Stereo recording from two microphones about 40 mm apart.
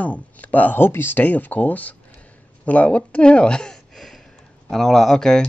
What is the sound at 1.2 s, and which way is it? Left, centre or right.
Speech, left.